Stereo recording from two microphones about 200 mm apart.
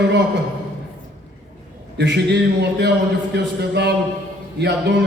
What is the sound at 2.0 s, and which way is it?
A man's voice, 60° right (ahead or behind).